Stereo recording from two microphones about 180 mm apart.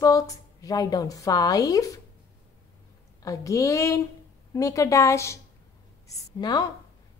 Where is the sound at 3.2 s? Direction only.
15° left (ahead or behind).